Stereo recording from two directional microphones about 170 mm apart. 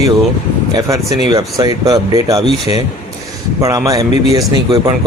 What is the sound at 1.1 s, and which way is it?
Speech, 25° right (ahead or behind).